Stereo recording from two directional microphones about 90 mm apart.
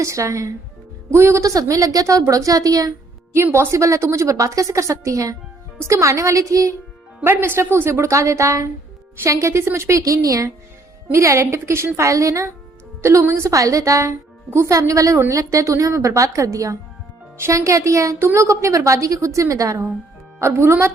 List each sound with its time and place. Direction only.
0.0 s a woman's voice: 35° right (ahead or behind)
3.3 s a woman's voice: 30° right (ahead or behind)
7.3 s a woman's voice: 25° right (ahead or behind)